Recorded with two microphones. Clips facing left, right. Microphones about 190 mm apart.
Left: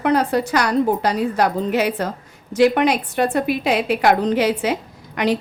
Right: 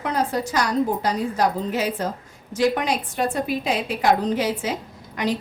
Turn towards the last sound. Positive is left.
turn(degrees=70)  # may be behind; listen again after turning